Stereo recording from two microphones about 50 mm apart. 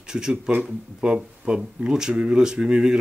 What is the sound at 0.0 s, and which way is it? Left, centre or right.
Speech, centre.